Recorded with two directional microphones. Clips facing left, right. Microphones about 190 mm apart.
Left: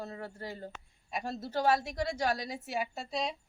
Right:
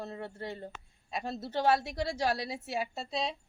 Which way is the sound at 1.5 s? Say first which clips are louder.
Right 1 dB; 25° right (ahead or behind).